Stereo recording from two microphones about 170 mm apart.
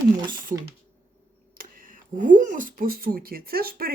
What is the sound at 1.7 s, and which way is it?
Speech, 50° right (ahead or behind).